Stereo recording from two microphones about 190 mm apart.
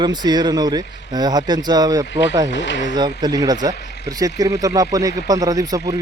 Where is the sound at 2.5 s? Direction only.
70° left (ahead or behind).